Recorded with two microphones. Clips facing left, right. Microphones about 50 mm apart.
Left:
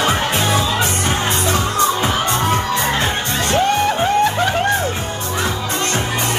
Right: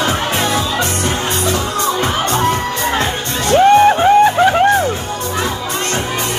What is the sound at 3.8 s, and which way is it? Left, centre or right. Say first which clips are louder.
Music: right 6 dB; centre.